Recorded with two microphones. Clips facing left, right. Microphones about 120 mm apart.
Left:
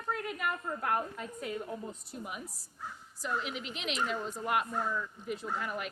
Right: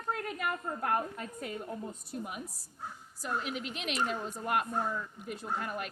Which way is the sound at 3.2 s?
45° right (ahead or behind).